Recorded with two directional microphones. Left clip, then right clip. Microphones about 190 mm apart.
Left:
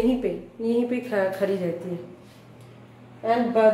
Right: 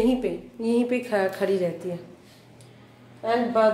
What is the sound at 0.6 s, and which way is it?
Speech, 25° right (ahead or behind).